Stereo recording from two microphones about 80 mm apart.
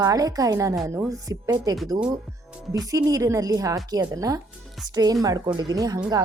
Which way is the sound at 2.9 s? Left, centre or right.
Right.